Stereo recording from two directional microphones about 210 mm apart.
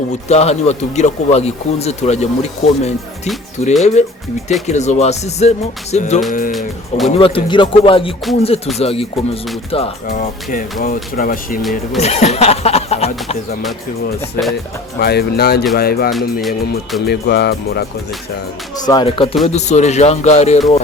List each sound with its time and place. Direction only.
0.3 s speech: 30° left (ahead or behind)
6.5 s music: centre (ahead or behind)
7.2 s speech: 25° left (ahead or behind)
10.1 s speech: 40° left (ahead or behind)
11.9 s speech: 30° left (ahead or behind)
14.4 s speech: 10° left (ahead or behind)
14.9 s speech: 50° left (ahead or behind)
16.1 s music: centre (ahead or behind)
17.1 s speech: 50° left (ahead or behind)
18.9 s speech: 20° left (ahead or behind)